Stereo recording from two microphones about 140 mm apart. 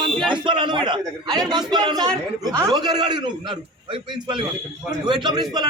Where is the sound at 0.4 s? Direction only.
35° right (ahead or behind).